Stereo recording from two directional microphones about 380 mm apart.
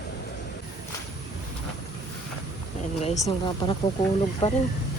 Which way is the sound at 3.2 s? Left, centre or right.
Centre.